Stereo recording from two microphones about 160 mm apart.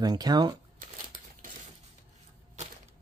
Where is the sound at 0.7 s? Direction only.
60° right (ahead or behind).